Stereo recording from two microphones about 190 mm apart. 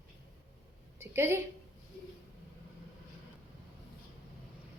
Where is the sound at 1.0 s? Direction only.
15° right (ahead or behind).